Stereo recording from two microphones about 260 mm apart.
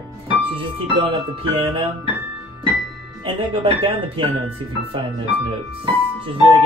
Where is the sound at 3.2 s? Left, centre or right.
Centre.